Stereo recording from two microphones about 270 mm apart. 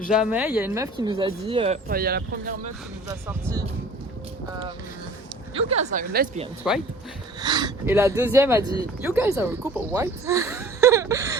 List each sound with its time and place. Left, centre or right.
0.1 s speech: centre; by 1.8 s right
1.9 s speech: right
5.5 s speech: right
7.4 s speech: centre